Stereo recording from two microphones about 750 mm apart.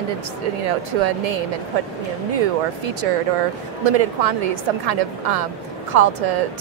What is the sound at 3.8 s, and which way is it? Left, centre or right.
A woman's voice, right.